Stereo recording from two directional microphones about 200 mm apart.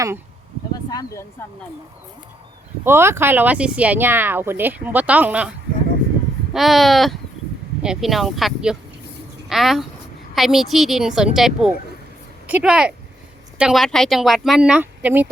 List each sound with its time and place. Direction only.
0.7 s a sound: 20° left (ahead or behind)
1.4 s speech: 10° left (ahead or behind)
2.8 s speech: 10° right (ahead or behind)